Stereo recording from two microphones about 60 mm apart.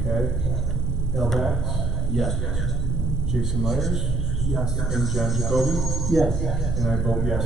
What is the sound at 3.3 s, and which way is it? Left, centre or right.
Speech, centre.